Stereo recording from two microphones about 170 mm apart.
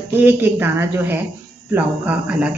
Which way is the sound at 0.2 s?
10° right (ahead or behind).